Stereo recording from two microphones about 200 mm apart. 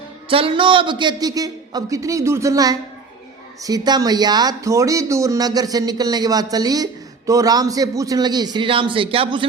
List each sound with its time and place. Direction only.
0.3 s speech: 25° right (ahead or behind)